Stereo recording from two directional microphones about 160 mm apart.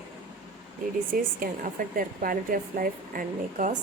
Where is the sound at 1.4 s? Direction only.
60° right (ahead or behind).